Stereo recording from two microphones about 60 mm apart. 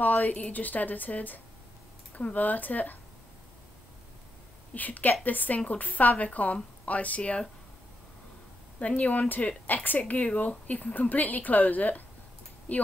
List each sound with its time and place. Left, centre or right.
0.0 s a woman's voice: left
4.7 s a woman's voice: left
8.7 s a woman's voice: left